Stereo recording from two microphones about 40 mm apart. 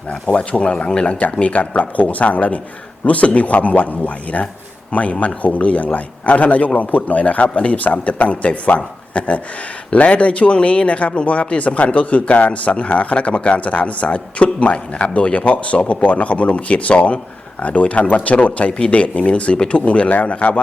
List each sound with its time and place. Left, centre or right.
0.3 s a man's voice: left